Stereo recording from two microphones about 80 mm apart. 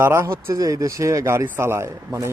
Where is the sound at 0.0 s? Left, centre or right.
Right.